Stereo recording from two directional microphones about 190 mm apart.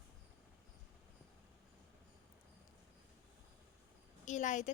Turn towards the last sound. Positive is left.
turn(degrees=40)  # may be behind; listen again after turning